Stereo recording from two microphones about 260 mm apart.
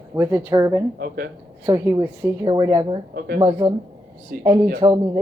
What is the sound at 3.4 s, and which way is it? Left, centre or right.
Speech, centre.